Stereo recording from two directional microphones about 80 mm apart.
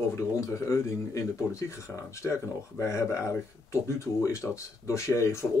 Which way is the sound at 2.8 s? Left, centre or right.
Left.